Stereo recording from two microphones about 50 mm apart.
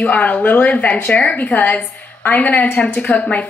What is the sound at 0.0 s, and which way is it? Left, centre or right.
A woman's voice, left.